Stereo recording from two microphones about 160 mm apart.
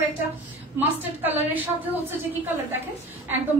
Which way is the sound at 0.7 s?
10° right (ahead or behind).